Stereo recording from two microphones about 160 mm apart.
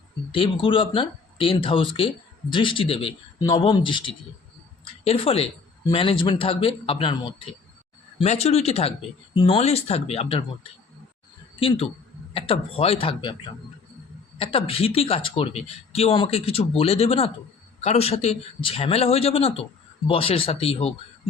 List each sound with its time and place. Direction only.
0.3 s speech: 30° left (ahead or behind)
8.2 s speech: 40° left (ahead or behind)
12.3 s speech: 35° left (ahead or behind)